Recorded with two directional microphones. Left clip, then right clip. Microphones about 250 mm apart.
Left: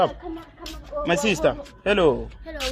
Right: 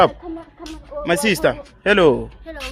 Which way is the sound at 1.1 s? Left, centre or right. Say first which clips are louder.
Right 4 dB; right.